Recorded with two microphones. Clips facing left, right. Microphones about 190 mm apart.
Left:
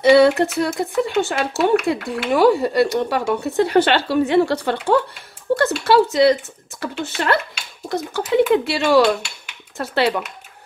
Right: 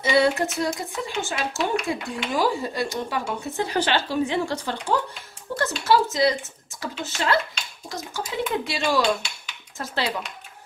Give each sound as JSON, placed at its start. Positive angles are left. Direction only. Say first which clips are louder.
{"t": 0.0, "sound": "speech", "louder": "left 8 dB", "side_deg": 65}